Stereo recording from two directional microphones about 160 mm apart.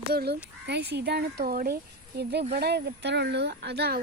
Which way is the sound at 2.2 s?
90° right.